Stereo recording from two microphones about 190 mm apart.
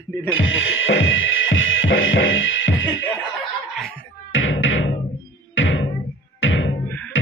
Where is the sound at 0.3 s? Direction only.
90° left.